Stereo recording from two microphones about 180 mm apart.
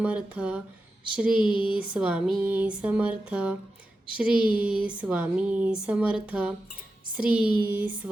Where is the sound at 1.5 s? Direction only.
30° left (ahead or behind).